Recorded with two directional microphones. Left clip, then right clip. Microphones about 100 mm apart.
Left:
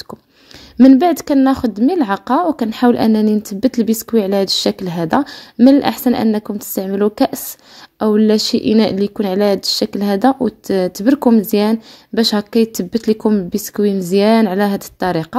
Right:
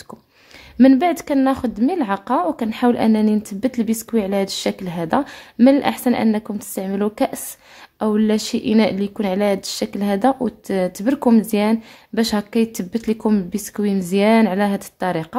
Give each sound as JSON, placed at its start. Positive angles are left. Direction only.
{"t": 0.8, "sound": "a woman's voice", "side_deg": 40}
{"t": 12.2, "sound": "a woman's voice", "side_deg": 35}